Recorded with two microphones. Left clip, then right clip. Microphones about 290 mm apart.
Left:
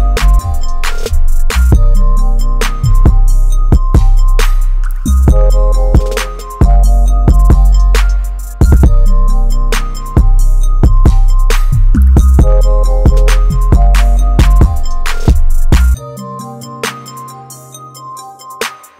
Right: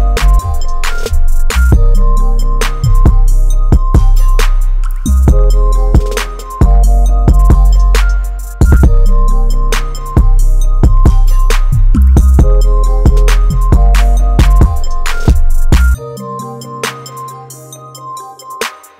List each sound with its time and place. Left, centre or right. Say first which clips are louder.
0.2 s music: right 1 dB; centre
18.5 s music: even; centre